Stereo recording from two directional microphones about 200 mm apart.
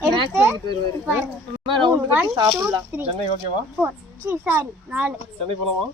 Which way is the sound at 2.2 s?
20° right (ahead or behind).